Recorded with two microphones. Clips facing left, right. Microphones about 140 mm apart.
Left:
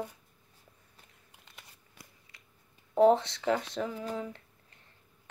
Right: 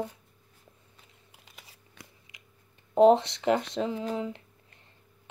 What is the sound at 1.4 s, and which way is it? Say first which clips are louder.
Crunch: right 1 dB; 5° right (ahead or behind).